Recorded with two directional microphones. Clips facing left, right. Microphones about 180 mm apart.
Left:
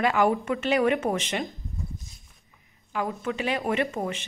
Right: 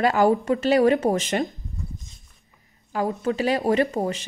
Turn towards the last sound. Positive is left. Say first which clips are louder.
# right 5 dB
turn(degrees=-35)  # may be behind; listen again after turning